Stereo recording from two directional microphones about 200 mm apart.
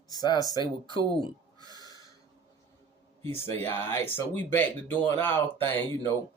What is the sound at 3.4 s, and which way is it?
Speech, 10° left (ahead or behind).